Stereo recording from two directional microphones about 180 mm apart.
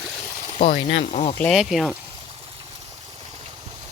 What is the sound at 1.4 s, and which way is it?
Speech, centre (ahead or behind).